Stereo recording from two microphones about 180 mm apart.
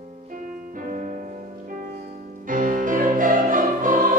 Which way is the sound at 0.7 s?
45° right (ahead or behind).